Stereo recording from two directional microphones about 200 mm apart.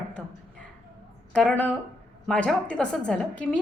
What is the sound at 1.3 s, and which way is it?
A woman's voice, 5° left (ahead or behind).